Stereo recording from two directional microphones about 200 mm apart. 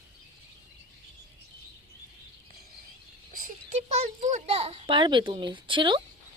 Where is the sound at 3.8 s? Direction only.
35° right (ahead or behind).